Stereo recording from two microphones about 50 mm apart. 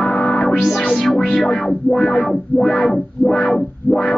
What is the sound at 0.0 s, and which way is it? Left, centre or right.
Music, centre.